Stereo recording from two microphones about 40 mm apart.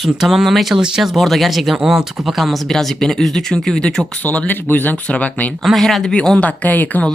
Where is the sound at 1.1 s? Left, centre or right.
Centre.